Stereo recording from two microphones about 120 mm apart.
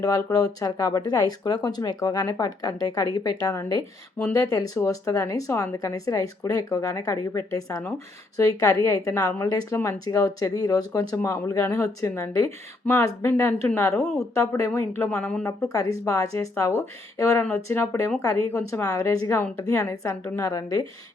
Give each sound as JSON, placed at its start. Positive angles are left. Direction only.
{"t": 0.0, "sound": "speech", "side_deg": 30}
{"t": 15.2, "sound": "speech", "side_deg": 5}
{"t": 15.4, "sound": "speech", "side_deg": 30}